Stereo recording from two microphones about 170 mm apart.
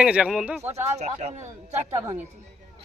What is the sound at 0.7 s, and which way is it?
Speech, 40° right (ahead or behind).